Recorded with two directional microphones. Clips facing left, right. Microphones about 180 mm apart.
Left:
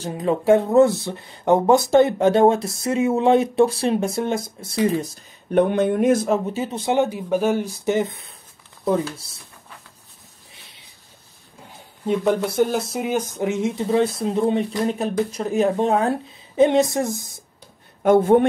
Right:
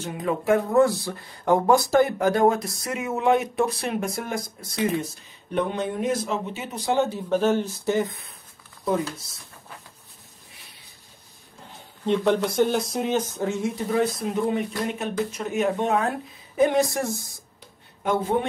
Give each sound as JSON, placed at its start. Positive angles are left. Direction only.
{"t": 0.0, "sound": "speech", "side_deg": 30}
{"t": 5.5, "sound": "speech", "side_deg": 55}
{"t": 6.8, "sound": "speech", "side_deg": 20}
{"t": 12.1, "sound": "a woman's voice", "side_deg": 10}
{"t": 18.0, "sound": "speech", "side_deg": 50}